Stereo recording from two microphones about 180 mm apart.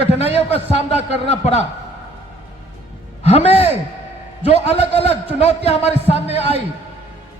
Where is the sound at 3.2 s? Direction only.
35° left (ahead or behind).